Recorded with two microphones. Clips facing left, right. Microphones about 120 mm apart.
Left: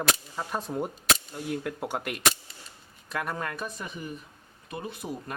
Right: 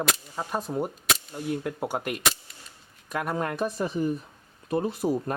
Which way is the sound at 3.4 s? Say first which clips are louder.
Right 7 dB; 25° right (ahead or behind).